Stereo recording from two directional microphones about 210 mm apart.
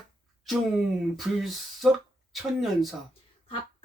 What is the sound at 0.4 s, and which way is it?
Speech, centre (ahead or behind).